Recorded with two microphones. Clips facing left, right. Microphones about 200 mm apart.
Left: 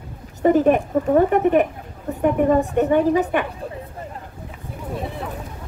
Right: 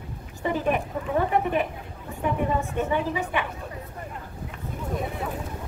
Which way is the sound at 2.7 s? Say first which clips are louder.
Left 9 dB; 55° left (ahead or behind).